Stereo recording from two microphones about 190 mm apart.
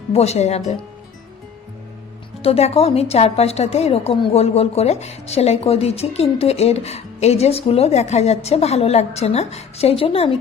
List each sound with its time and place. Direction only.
0.1 s a woman's voice: 35° left (ahead or behind)
2.4 s a woman's voice: 30° left (ahead or behind)